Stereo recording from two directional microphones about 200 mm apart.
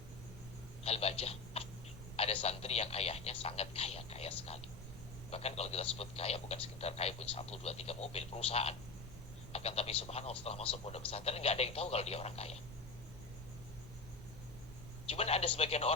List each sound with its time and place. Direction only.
0.9 s a sound: 30° left (ahead or behind)
2.1 s speech: 30° left (ahead or behind)
15.1 s speech: 30° left (ahead or behind)